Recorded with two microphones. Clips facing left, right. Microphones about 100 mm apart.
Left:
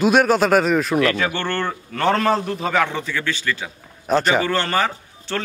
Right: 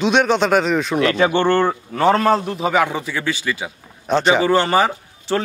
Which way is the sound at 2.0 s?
5° right (ahead or behind).